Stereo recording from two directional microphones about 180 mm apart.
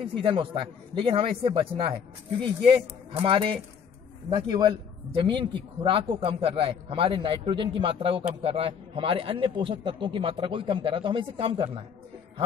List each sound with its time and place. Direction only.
0.2 s speech: 30° right (ahead or behind)